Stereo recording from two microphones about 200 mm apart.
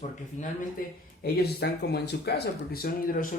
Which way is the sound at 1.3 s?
55° left (ahead or behind).